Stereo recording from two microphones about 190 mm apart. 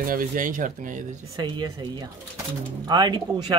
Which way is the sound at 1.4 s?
20° right (ahead or behind).